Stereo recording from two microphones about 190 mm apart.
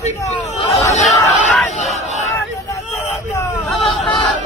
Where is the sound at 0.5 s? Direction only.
35° left (ahead or behind).